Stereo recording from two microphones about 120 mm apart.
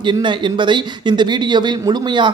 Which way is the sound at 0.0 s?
40° right (ahead or behind).